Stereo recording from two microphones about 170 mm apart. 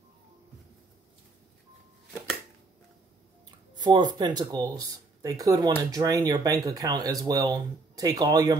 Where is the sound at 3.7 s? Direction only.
25° right (ahead or behind).